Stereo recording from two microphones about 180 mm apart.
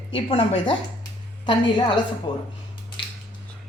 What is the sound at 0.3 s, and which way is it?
Speech, 30° left (ahead or behind).